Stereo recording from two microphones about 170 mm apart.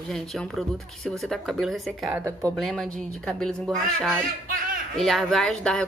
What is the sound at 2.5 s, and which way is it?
A woman's voice, centre (ahead or behind).